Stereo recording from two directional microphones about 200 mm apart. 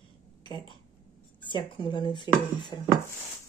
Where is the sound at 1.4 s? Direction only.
25° left (ahead or behind).